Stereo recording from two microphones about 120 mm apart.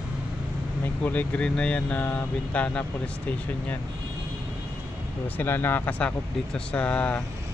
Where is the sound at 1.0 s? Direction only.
15° left (ahead or behind).